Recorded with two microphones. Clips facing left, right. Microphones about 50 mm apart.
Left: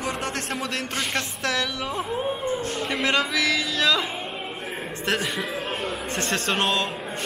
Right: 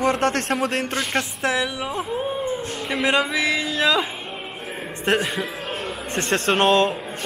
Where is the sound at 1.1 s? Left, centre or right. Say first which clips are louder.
Right 4 dB; right.